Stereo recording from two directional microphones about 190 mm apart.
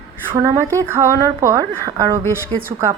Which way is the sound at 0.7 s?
15° right (ahead or behind).